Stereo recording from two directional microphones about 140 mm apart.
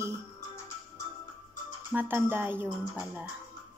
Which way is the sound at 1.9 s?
15° right (ahead or behind).